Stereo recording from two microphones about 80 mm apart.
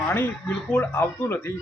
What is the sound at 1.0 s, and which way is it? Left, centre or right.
Speech, left.